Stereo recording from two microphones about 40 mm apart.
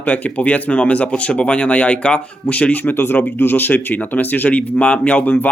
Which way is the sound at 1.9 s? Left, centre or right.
Left.